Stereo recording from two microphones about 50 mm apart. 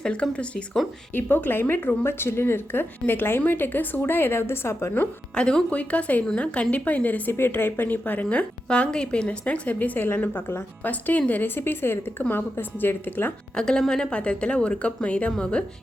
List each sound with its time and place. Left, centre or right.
0.0 s a woman's voice: left
1.1 s speech: left
5.3 s a woman's voice: centre
9.4 s a woman's voice: left
13.6 s a woman's voice: centre